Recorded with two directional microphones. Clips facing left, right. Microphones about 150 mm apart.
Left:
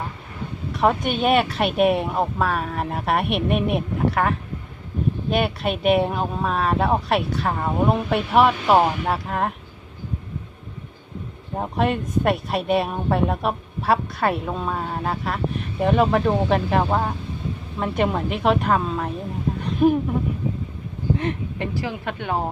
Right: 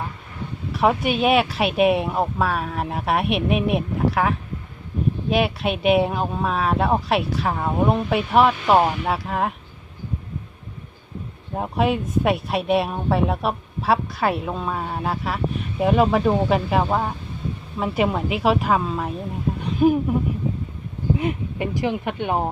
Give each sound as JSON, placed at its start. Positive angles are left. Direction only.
{"t": 0.7, "sound": "speech", "side_deg": 0}
{"t": 11.5, "sound": "speech", "side_deg": 0}
{"t": 19.6, "sound": "a sound", "side_deg": 0}
{"t": 21.2, "sound": "speech", "side_deg": -10}